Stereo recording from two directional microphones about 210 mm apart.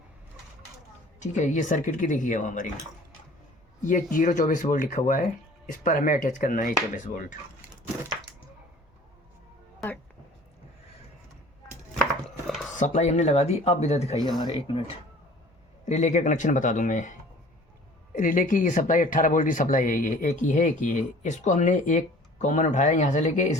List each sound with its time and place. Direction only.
1.2 s speech: 35° left (ahead or behind)
3.8 s speech: 40° left (ahead or behind)
12.7 s speech: 35° left (ahead or behind)
15.9 s speech: 35° left (ahead or behind)